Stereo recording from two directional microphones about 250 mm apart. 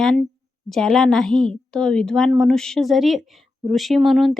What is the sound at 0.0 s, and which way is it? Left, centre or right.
A woman's voice, centre.